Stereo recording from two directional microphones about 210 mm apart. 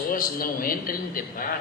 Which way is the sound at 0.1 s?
40° left (ahead or behind).